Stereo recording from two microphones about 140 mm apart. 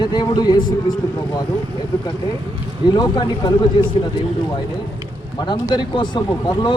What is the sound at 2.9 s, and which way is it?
Speech, 30° left (ahead or behind).